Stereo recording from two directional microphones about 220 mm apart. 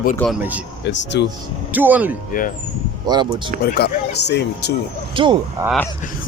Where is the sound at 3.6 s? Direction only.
45° left (ahead or behind).